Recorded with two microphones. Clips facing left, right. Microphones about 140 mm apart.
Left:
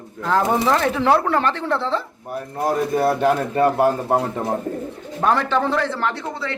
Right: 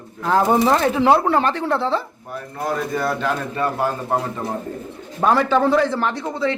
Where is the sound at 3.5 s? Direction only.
55° left (ahead or behind).